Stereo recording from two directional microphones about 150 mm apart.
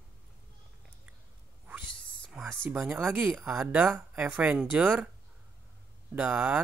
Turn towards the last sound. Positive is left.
turn(degrees=-10)  # may be behind; listen again after turning